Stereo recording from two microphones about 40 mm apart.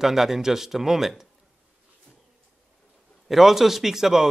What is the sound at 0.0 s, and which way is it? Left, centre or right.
A man's voice, centre.